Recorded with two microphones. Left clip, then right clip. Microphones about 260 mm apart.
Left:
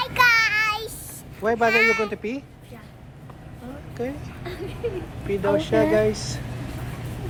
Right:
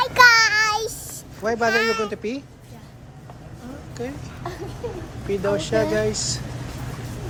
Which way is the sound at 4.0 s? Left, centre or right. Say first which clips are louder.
Left 2 dB; centre.